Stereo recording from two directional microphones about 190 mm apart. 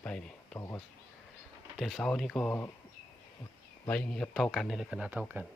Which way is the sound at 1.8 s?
Centre (ahead or behind).